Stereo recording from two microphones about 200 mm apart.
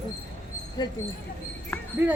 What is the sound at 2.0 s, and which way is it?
Speech, 10° right (ahead or behind).